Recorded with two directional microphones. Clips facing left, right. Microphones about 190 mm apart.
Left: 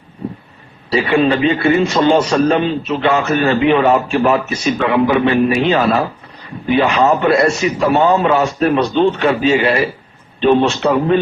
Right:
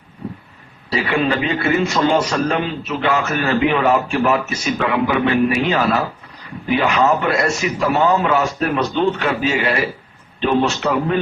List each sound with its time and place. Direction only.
0.2 s vehicle: 25° left (ahead or behind)
0.9 s a man's voice: 30° left (ahead or behind)